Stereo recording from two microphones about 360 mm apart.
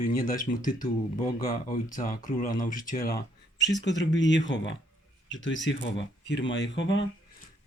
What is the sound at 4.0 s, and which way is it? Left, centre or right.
Speech, left.